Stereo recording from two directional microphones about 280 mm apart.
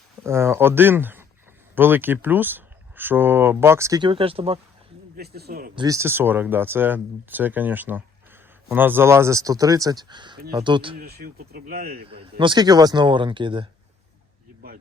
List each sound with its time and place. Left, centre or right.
0.2 s speech: centre
5.1 s speech: right
5.7 s speech: centre
10.9 s speech: right
12.4 s speech: centre